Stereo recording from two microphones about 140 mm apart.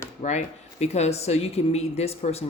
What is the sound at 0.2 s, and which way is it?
Speech, 55° left (ahead or behind).